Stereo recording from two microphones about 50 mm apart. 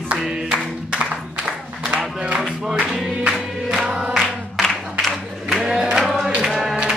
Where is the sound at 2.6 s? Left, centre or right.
Centre.